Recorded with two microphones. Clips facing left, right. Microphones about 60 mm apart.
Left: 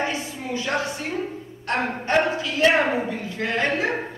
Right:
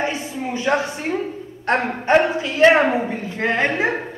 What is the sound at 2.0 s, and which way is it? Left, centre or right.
A woman's voice, right.